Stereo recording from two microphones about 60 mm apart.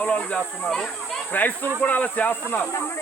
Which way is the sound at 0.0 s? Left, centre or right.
Left.